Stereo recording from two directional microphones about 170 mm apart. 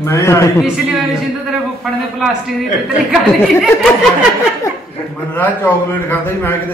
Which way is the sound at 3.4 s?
Centre (ahead or behind).